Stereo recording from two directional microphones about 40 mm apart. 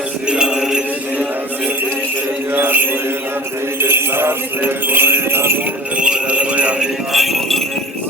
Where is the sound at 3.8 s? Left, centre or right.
Right.